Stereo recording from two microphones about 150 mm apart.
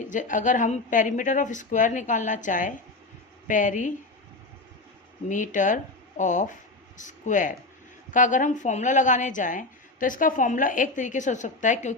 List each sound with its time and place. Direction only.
0.1 s a woman's voice: 60° left (ahead or behind)
5.3 s a woman's voice: 60° left (ahead or behind)